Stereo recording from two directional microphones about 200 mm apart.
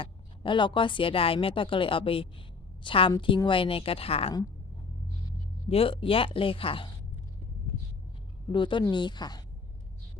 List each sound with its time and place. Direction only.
0.0 s a woman's voice: 25° left (ahead or behind)
5.6 s a woman's voice: 30° left (ahead or behind)
8.5 s a woman's voice: 25° left (ahead or behind)